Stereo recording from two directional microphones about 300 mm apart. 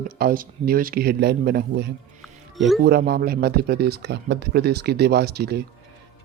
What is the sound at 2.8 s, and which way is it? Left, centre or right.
Speech, right.